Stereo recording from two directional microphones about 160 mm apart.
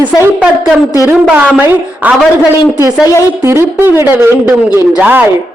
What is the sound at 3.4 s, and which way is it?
A man's voice, 15° right (ahead or behind).